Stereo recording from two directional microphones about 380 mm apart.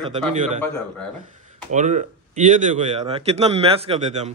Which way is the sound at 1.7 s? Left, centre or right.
Centre.